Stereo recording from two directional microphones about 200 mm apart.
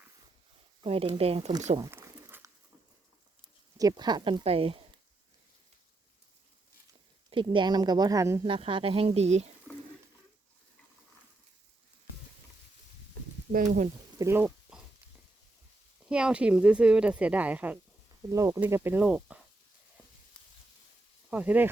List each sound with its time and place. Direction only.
0.9 s speech: 30° right (ahead or behind)
1.8 s a sound: 10° right (ahead or behind)
3.8 s speech: 20° right (ahead or behind)
7.3 s speech: 25° right (ahead or behind)
13.5 s speech: 40° right (ahead or behind)
14.2 s a sound: 10° right (ahead or behind)
16.0 s speech: 5° right (ahead or behind)
21.2 s speech: 5° right (ahead or behind)